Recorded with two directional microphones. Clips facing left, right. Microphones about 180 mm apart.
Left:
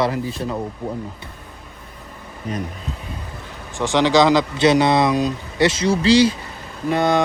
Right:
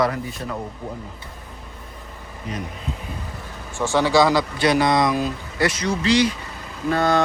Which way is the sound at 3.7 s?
15° left (ahead or behind).